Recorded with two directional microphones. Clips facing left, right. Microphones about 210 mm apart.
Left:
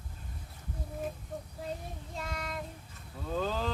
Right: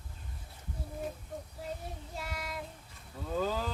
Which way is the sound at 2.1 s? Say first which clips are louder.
Left 2 dB; 10° right (ahead or behind).